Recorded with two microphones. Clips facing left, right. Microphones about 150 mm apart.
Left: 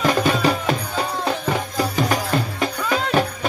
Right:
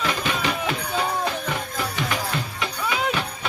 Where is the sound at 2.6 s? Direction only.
45° left (ahead or behind).